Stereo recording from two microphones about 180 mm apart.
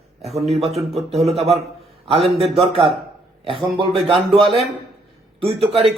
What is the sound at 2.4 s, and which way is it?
A man's voice, 35° right (ahead or behind).